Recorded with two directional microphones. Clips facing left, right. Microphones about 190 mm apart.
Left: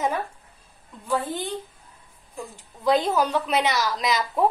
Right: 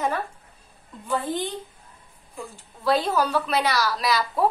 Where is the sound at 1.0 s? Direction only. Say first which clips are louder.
Even; 10° left (ahead or behind).